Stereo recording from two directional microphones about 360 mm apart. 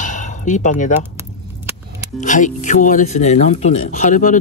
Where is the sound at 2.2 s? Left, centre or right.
Centre.